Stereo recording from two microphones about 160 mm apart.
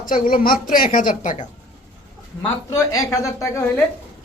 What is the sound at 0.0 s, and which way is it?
A woman's voice, 60° left (ahead or behind).